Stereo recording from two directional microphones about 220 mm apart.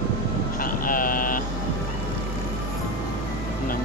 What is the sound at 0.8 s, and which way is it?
Vehicle, 40° left (ahead or behind).